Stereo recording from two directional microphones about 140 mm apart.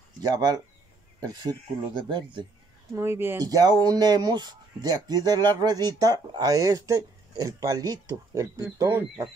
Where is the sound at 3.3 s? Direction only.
25° right (ahead or behind).